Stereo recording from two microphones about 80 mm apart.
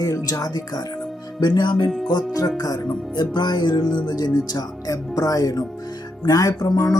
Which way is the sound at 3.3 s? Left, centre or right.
Left.